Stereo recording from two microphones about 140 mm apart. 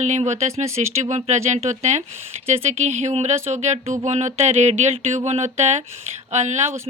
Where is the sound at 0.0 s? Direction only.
55° right (ahead or behind).